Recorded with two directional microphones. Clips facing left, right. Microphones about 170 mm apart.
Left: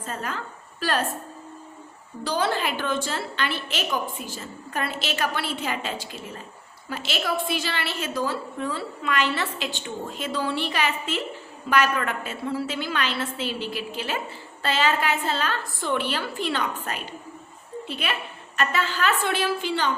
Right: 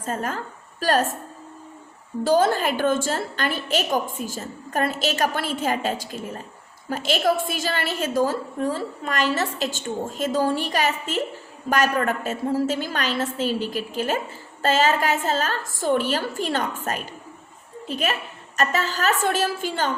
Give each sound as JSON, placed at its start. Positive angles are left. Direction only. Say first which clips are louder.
{"t": 0.0, "sound": "a woman's voice", "louder": "right 4 dB", "side_deg": -45}
{"t": 2.2, "sound": "a woman's voice", "louder": "right 6 dB", "side_deg": -45}